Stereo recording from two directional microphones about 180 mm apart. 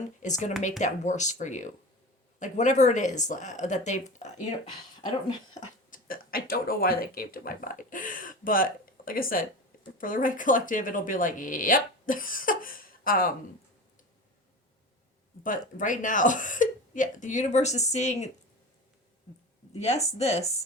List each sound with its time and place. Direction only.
0.2 s speech: 40° left (ahead or behind)
5.5 s speech: 50° left (ahead or behind)
15.8 s speech: 45° left (ahead or behind)
19.8 s speech: 35° left (ahead or behind)